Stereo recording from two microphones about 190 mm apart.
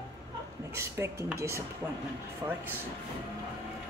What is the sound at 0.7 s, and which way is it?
Speech, 15° right (ahead or behind).